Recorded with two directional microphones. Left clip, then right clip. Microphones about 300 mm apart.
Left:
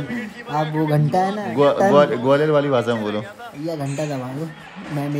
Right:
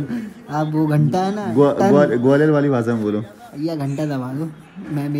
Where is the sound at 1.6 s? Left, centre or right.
Centre.